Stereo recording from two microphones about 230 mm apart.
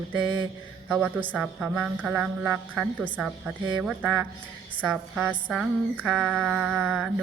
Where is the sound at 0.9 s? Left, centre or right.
Centre.